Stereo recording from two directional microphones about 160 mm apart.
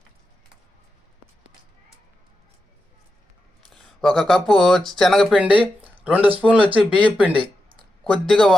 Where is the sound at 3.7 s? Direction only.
Centre (ahead or behind).